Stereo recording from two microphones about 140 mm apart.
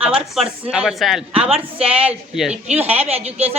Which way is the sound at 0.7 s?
5° right (ahead or behind).